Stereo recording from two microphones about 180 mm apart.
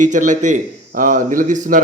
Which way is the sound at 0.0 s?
45° right (ahead or behind).